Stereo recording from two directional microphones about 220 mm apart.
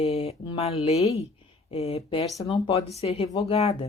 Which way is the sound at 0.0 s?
25° left (ahead or behind).